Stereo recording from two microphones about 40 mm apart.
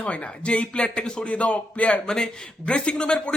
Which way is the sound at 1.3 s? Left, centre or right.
Left.